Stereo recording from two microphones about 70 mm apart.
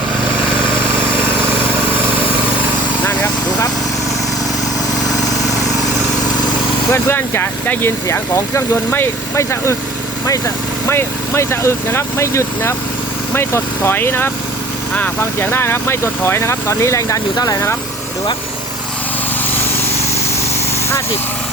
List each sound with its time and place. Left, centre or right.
3.0 s a sound: left
6.9 s speech: left
10.8 s speech: left
17.3 s speech: left